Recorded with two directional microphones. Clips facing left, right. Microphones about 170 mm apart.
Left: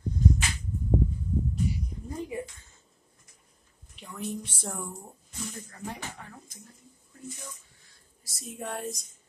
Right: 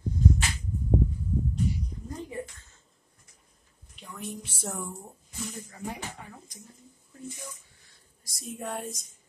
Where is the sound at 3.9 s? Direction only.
Centre (ahead or behind); by 6.5 s 15° right (ahead or behind).